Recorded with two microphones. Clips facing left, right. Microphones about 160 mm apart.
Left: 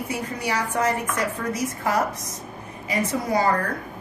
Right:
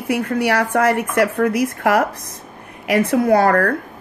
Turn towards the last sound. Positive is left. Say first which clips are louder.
# right 8 dB
turn(degrees=-65)  # may be behind; listen again after turning